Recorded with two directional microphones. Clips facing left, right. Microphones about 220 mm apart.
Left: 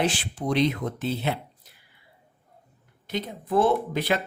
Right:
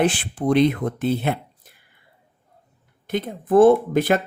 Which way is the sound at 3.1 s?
50° right (ahead or behind).